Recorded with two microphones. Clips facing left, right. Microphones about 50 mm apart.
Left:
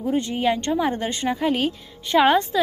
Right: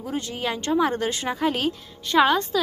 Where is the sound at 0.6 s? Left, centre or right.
Centre.